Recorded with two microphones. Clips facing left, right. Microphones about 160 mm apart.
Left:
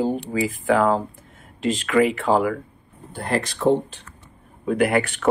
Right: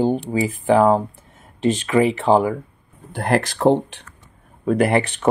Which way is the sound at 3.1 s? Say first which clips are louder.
Right 5 dB; 80° right.